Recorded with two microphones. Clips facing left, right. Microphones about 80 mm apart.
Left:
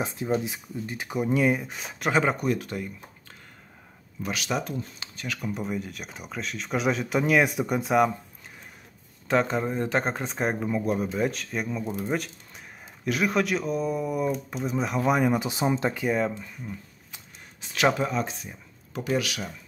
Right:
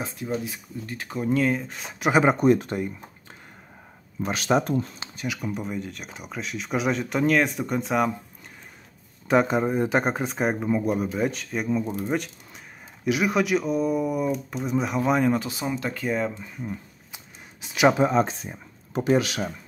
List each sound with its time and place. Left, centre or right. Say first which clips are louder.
0.0 s speech: left 2 dB; left
1.8 s speech: even; centre
2.0 s speech: right 5 dB; centre
4.2 s speech: right 6 dB; right
5.0 s speech: right 4 dB; centre
5.4 s speech: left 3 dB; centre
9.3 s speech: right 4 dB; centre
15.4 s speech: left 3 dB; left
16.0 s speech: left 1 dB; centre
16.3 s a sound: right 4 dB; centre
18.1 s speech: right 7 dB; right